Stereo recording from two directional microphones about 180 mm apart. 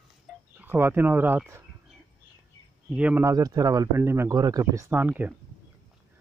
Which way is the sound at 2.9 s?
10° right (ahead or behind).